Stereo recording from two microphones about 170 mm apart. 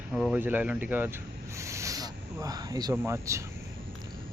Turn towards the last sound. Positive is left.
turn(degrees=-20)  # may be behind; listen again after turning